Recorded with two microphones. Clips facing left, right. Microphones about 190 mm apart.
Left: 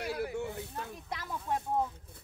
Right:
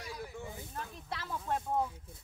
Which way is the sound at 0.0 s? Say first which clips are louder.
Left 9 dB; 70° left (ahead or behind).